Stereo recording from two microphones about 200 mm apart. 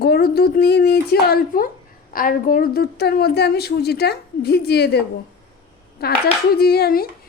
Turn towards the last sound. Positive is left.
turn(degrees=50)  # may be behind; listen again after turning